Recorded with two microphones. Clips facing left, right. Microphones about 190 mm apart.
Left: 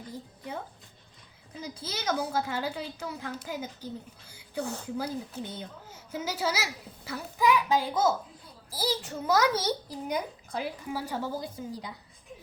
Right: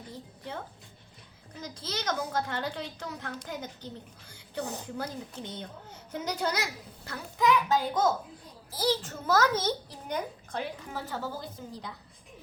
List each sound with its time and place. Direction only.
1.6 s a woman's voice: 10° left (ahead or behind)
4.6 s a woman's voice: 15° right (ahead or behind)
4.9 s a woman's voice: 10° left (ahead or behind)